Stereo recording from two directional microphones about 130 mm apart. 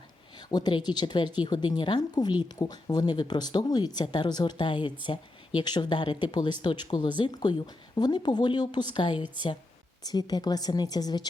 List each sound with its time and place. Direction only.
0.3 s speech: 35° left (ahead or behind)